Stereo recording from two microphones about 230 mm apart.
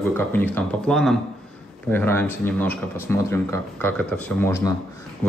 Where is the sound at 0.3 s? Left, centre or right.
Centre.